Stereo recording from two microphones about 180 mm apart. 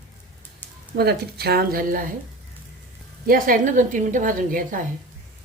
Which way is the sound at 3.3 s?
50° right (ahead or behind).